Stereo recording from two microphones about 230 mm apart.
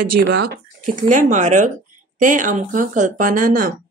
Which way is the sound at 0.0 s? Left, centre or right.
Right.